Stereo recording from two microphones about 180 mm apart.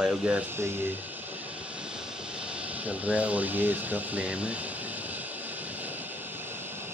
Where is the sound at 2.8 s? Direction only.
10° right (ahead or behind).